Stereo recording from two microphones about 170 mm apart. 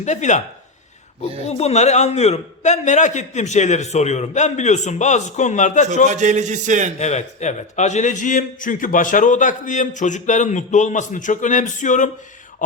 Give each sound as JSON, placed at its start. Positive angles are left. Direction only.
{"t": 0.0, "sound": "a man's voice", "side_deg": 45}
{"t": 1.5, "sound": "a man's voice", "side_deg": 40}
{"t": 6.1, "sound": "a man's voice", "side_deg": -45}
{"t": 7.0, "sound": "a man's voice", "side_deg": 40}